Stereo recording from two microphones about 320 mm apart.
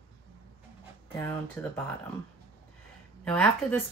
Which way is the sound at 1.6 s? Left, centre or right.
Centre.